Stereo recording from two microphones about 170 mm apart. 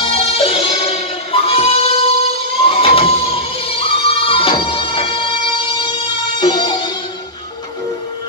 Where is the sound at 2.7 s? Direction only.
35° left (ahead or behind).